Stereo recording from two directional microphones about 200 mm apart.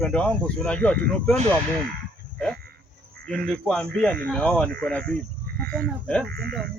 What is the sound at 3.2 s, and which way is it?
Speech, 5° left (ahead or behind).